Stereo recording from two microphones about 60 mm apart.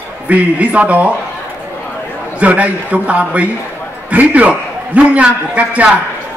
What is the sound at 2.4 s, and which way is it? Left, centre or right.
A man's voice, right.